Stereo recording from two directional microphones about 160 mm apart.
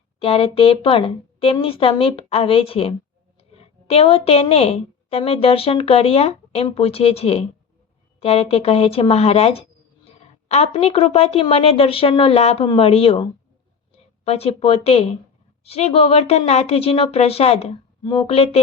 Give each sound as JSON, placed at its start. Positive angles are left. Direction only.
{"t": 0.2, "sound": "a woman's voice", "side_deg": 35}